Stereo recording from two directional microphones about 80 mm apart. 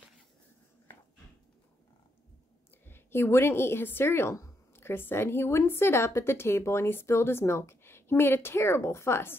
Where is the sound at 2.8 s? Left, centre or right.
Left.